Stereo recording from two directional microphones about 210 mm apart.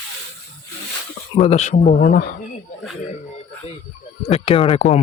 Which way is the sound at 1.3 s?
30° left (ahead or behind).